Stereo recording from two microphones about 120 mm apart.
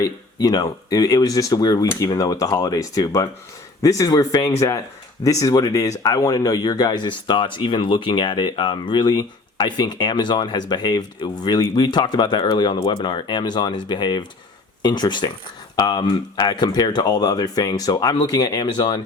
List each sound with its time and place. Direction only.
0.0 s speech: 35° left (ahead or behind)